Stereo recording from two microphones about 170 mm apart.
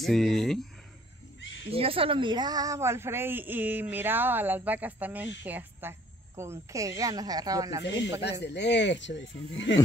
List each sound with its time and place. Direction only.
0.0 s speech: centre (ahead or behind)
1.7 s speech: 35° right (ahead or behind)
7.8 s speech: 90° left